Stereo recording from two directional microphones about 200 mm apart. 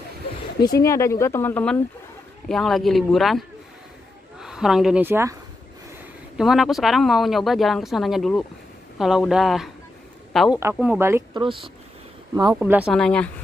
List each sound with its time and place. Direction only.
0.7 s speech: 15° left (ahead or behind); by 5.3 s 10° right (ahead or behind)
6.3 s speech: centre (ahead or behind)
11.4 s speech: 25° right (ahead or behind)
12.5 s speech: 10° right (ahead or behind)
12.9 s speech: 5° left (ahead or behind)